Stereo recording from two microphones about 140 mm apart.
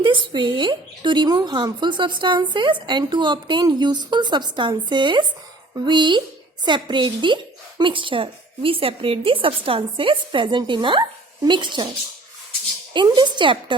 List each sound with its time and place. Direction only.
0.0 s speech: 35° right (ahead or behind)
13.1 s speech: 30° right (ahead or behind)